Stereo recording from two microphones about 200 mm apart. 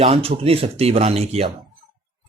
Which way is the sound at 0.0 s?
30° right (ahead or behind).